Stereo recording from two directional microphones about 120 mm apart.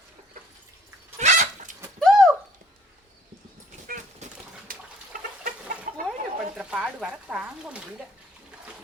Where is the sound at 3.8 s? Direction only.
90° right.